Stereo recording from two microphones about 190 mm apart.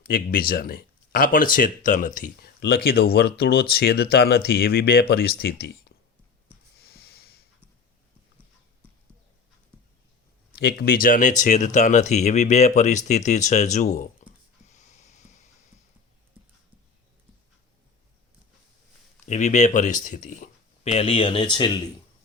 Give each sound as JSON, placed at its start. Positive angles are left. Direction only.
{"t": 0.0, "sound": "speech", "side_deg": 50}
{"t": 6.7, "sound": "snort", "side_deg": 55}
{"t": 10.5, "sound": "speech", "side_deg": 55}
{"t": 14.7, "sound": "a sound", "side_deg": 40}
{"t": 19.2, "sound": "speech", "side_deg": 40}